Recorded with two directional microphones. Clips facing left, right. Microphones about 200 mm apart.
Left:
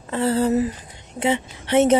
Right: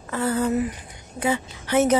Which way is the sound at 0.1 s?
30° left (ahead or behind).